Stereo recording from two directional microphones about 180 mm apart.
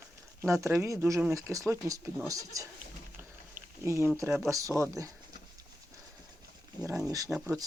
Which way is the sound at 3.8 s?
15° right (ahead or behind).